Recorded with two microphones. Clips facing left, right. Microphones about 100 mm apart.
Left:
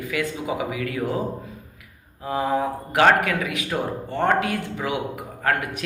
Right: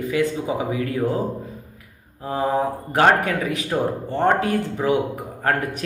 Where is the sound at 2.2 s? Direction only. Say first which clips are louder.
Right 1 dB; 35° right (ahead or behind).